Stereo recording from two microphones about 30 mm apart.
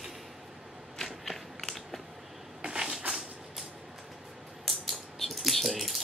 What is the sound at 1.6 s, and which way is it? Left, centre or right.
Biting, centre.